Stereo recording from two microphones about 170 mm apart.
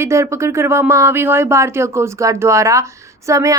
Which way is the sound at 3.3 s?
20° right (ahead or behind).